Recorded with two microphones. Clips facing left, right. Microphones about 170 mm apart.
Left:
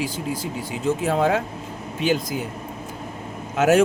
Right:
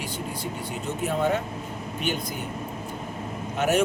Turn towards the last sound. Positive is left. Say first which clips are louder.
# left 6 dB
turn(degrees=90)